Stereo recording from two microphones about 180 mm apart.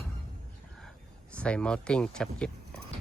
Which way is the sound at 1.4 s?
5° left (ahead or behind).